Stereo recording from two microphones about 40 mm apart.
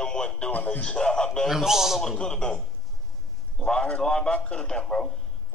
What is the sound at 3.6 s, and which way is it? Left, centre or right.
A man's voice, left.